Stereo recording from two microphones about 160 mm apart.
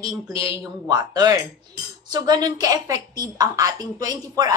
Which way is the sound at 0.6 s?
25° right (ahead or behind).